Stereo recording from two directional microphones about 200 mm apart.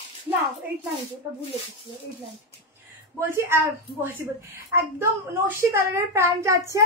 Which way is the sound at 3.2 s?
10° right (ahead or behind).